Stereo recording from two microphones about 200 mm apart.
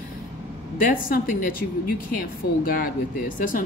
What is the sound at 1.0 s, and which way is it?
Speech, 45° left (ahead or behind).